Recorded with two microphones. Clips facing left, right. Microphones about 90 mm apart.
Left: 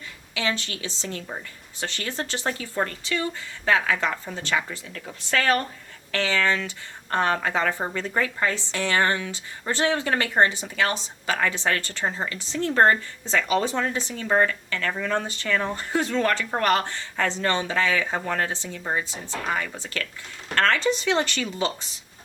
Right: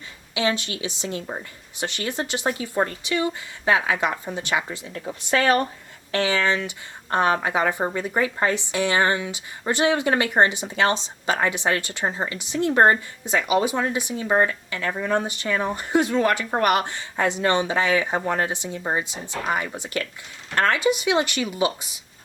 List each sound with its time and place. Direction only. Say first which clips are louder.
0.3 s speech: right 4 dB; 20° right (ahead or behind)